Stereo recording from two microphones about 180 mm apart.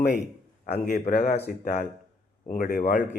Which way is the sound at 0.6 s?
55° left (ahead or behind).